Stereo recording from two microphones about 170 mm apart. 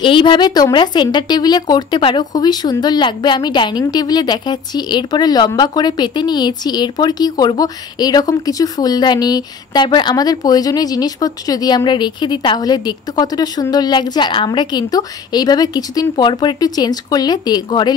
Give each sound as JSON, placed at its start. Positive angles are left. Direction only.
{"t": 0.0, "sound": "a woman's voice", "side_deg": 30}